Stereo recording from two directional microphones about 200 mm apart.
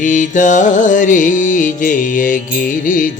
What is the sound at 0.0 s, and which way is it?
Music, 40° left (ahead or behind).